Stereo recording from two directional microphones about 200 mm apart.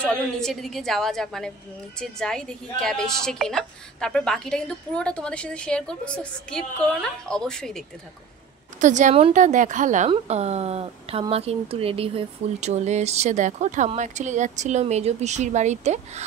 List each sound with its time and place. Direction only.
0.0 s a woman's voice: 5° left (ahead or behind)
8.7 s speech: 35° right (ahead or behind)